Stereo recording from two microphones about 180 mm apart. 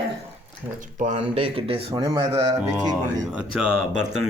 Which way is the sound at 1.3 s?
30° right (ahead or behind).